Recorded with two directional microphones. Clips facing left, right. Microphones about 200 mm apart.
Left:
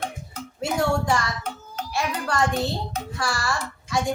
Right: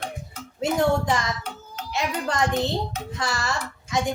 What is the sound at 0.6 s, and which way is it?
A child's voice, 20° right (ahead or behind).